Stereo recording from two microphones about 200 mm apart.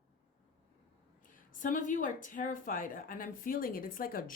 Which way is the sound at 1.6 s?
40° left (ahead or behind).